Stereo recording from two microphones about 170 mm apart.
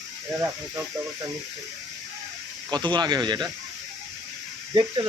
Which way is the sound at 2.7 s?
25° right (ahead or behind).